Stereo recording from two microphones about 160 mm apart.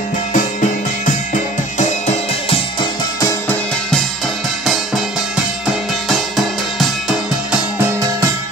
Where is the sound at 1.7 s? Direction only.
45° left (ahead or behind).